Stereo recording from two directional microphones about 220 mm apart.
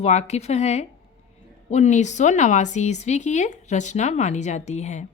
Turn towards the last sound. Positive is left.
turn(degrees=30)  # may be behind; listen again after turning